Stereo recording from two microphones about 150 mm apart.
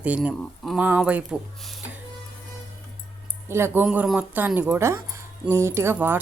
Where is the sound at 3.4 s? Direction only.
15° right (ahead or behind).